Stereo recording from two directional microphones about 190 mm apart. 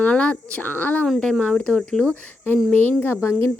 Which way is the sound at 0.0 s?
5° left (ahead or behind).